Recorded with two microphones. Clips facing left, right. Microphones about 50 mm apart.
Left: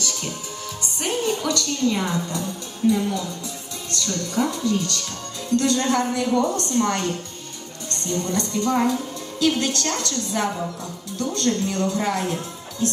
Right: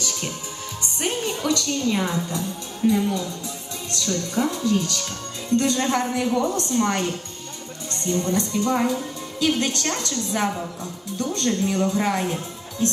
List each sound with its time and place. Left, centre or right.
0.0 s music: centre
1.0 s a woman's voice: centre